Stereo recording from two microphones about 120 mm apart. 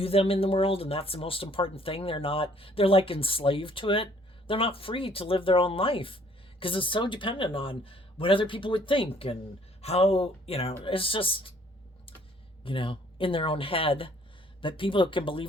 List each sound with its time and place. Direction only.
0.0 s speech: 55° left (ahead or behind)
12.6 s speech: 45° left (ahead or behind)